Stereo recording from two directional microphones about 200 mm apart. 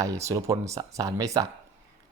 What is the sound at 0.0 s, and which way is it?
Speech, 15° right (ahead or behind).